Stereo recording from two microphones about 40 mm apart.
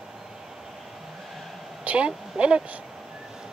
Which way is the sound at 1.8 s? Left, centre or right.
Right.